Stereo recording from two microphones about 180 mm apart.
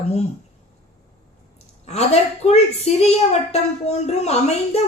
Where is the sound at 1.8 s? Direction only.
35° left (ahead or behind).